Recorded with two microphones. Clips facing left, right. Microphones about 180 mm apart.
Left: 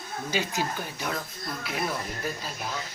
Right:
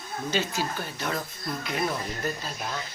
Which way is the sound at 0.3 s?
15° left (ahead or behind).